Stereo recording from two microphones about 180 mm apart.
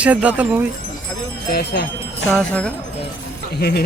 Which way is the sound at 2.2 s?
5° left (ahead or behind).